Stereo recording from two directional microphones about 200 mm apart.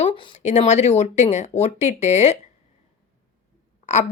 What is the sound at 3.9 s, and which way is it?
Speech, 35° left (ahead or behind).